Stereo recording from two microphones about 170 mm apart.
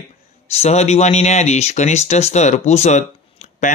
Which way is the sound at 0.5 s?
40° left (ahead or behind).